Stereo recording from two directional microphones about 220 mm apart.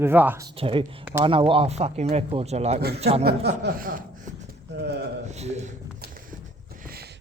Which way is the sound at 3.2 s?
45° right (ahead or behind).